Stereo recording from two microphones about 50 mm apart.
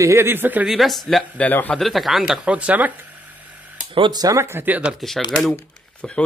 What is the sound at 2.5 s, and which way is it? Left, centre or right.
Speech, right.